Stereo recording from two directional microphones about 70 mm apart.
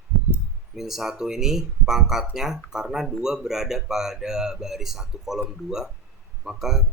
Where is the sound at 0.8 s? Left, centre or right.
Centre.